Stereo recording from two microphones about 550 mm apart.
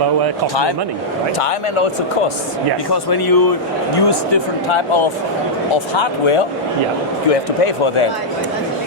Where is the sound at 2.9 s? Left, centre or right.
Left.